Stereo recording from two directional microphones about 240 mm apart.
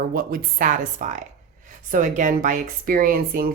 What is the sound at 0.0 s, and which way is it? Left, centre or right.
Speech, right.